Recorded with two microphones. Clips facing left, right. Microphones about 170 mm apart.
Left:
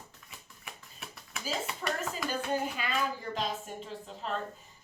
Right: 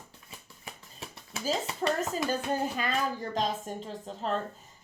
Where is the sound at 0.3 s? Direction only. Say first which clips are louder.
Right 4 dB; 30° right (ahead or behind).